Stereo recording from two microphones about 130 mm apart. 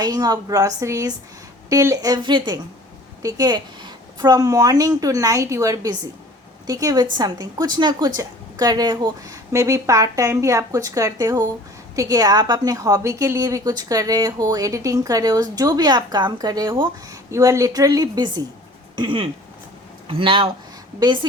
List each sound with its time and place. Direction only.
0.0 s a woman's voice: 30° right (ahead or behind)
17.3 s a woman's voice: 25° right (ahead or behind)
18.9 s a woman's voice: 40° right (ahead or behind)